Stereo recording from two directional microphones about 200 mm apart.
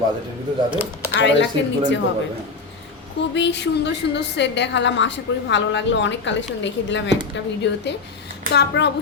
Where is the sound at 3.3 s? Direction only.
60° left (ahead or behind).